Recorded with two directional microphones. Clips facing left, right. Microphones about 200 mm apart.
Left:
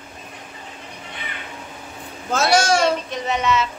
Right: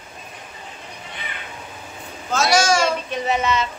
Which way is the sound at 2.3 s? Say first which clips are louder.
Left 1 dB; 55° left (ahead or behind).